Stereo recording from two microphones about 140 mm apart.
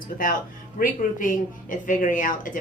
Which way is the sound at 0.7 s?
80° left.